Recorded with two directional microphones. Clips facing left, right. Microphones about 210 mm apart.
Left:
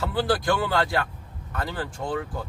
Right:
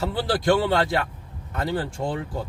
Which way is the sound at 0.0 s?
25° right (ahead or behind).